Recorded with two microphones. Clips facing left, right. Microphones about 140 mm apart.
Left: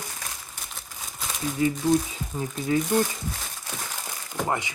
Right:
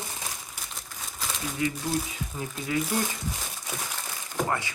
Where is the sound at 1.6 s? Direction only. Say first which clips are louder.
Left 7 dB; 30° left (ahead or behind).